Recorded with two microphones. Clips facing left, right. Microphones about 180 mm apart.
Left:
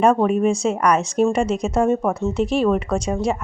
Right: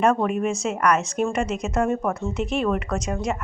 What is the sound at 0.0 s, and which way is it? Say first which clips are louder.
Speech: left 4 dB; 30° left (ahead or behind).